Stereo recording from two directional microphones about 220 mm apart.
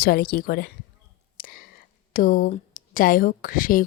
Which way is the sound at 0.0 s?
45° left (ahead or behind).